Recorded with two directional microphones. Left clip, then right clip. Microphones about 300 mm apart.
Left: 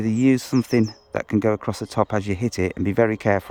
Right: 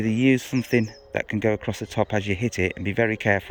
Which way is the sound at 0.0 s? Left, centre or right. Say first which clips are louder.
Left 1 dB; centre.